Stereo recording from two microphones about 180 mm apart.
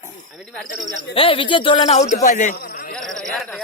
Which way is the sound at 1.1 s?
30° left (ahead or behind).